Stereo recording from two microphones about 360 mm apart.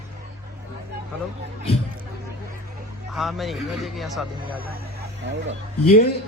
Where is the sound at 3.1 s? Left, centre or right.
Centre.